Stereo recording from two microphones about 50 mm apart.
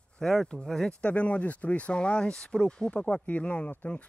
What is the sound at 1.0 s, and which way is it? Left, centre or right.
Speech, left.